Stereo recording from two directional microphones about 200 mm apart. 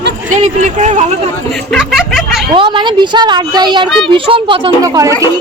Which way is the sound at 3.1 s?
20° right (ahead or behind).